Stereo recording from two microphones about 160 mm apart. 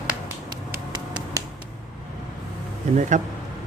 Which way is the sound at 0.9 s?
25° right (ahead or behind).